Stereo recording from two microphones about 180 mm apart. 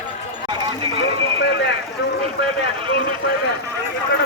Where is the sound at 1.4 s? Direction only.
80° left.